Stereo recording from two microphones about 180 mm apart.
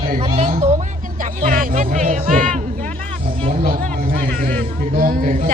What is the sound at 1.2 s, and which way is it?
Music, 50° right (ahead or behind).